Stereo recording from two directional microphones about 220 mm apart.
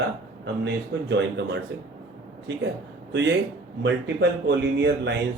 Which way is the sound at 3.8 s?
50° right (ahead or behind).